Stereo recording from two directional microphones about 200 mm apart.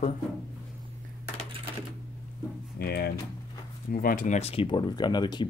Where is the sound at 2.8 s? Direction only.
50° left (ahead or behind); by 5.5 s 20° left (ahead or behind).